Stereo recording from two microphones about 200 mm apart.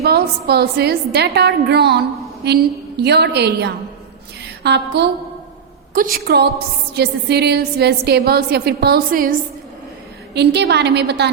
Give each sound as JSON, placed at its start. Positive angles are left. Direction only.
{"t": 0.0, "sound": "a woman's voice", "side_deg": -55}
{"t": 6.2, "sound": "a woman's voice", "side_deg": -55}
{"t": 10.3, "sound": "a woman's voice", "side_deg": -55}